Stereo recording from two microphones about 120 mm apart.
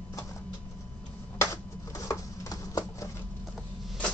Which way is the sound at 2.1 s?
30° left (ahead or behind).